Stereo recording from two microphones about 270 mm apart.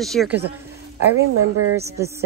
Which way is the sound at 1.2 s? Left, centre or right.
Right.